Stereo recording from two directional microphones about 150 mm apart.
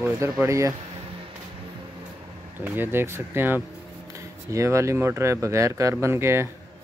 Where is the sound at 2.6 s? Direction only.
15° right (ahead or behind).